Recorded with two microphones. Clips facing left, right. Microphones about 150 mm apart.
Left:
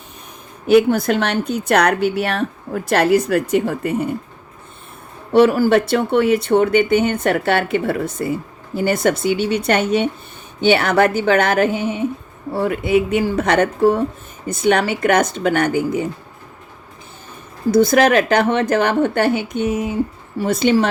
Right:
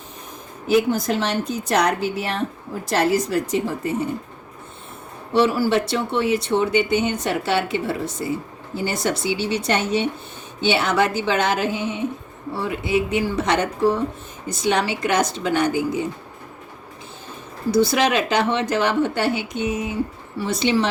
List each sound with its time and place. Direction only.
0.7 s a woman's voice: 60° left (ahead or behind)
5.3 s a woman's voice: 50° left (ahead or behind)
17.7 s a woman's voice: 50° left (ahead or behind)